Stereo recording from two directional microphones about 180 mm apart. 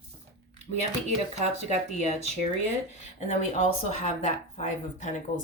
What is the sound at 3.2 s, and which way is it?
Speech, 40° left (ahead or behind).